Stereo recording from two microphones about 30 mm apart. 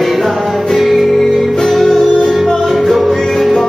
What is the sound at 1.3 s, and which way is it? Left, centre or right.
Music, centre.